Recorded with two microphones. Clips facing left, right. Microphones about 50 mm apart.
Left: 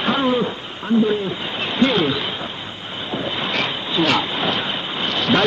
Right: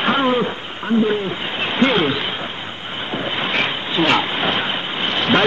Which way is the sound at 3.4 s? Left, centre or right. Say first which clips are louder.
Right 2 dB; right.